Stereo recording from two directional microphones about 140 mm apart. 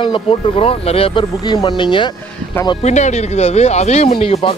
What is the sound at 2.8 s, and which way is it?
Speech, 55° left (ahead or behind).